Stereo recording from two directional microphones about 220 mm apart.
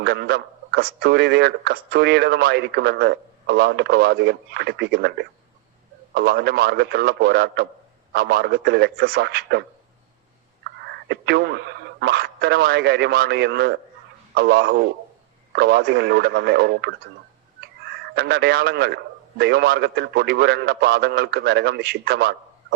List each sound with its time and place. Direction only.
0.0 s speech: 50° right (ahead or behind)
11.1 s speech: 50° right (ahead or behind)
18.1 s speech: 45° right (ahead or behind)